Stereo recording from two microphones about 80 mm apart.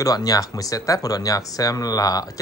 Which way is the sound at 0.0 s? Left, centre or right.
Left.